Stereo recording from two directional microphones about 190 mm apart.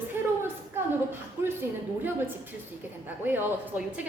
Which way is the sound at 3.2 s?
10° right (ahead or behind).